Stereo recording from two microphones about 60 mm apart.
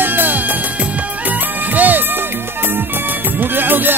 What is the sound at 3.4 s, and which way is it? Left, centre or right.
Music, right.